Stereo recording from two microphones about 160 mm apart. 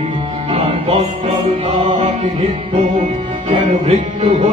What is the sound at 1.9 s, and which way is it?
Chant, 40° right (ahead or behind).